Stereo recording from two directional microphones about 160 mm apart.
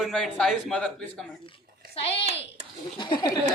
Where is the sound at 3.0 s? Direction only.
30° left (ahead or behind).